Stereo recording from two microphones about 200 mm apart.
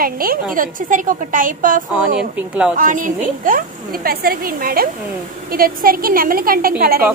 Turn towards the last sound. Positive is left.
turn(degrees=-45)  # may be behind; listen again after turning